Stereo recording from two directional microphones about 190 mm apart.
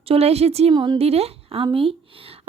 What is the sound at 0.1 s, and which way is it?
A woman's voice, 35° right (ahead or behind).